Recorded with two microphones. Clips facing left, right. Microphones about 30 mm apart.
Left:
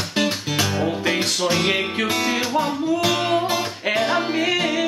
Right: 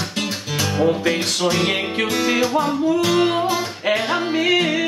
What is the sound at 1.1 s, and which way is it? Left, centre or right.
Music, centre.